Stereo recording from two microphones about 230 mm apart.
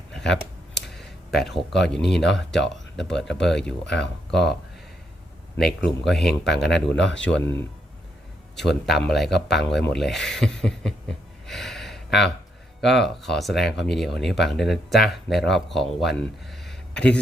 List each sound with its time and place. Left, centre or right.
0.1 s a sound: centre
1.9 s speech: centre
5.8 s speech: centre
6.2 s speech: left
6.6 s speech: centre
6.9 s speech: left
7.3 s speech: centre
8.9 s speech: centre
11.4 s a sound: centre
12.8 s speech: centre